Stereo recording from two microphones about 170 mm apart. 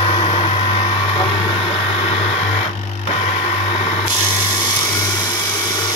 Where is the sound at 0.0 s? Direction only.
30° left (ahead or behind).